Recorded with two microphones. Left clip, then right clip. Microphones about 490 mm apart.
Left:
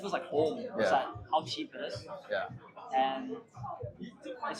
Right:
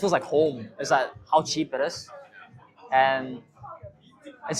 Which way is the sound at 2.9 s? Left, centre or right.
Right.